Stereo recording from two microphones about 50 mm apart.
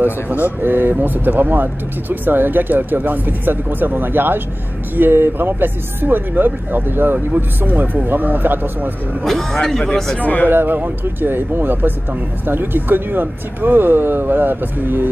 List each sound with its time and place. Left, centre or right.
0.0 s speech: right
9.2 s speech: centre
10.1 s speech: left
10.5 s speech: right